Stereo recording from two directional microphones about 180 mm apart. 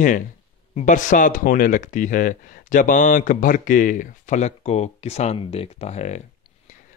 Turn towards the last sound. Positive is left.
turn(degrees=40)  # may be behind; listen again after turning